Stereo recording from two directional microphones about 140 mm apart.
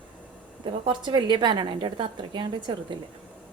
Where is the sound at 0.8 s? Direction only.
35° right (ahead or behind).